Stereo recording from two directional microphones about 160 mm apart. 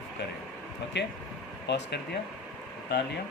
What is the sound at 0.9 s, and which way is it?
Speech, 90° left.